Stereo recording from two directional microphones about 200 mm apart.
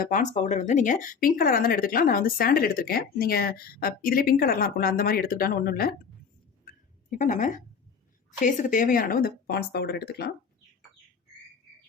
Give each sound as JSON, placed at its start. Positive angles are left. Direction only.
{"t": 0.0, "sound": "a woman's voice", "side_deg": 40}
{"t": 6.7, "sound": "a sound", "side_deg": 40}
{"t": 8.3, "sound": "a woman's voice", "side_deg": 40}